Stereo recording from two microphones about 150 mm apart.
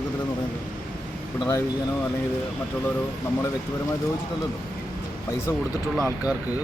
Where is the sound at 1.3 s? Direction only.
20° left (ahead or behind).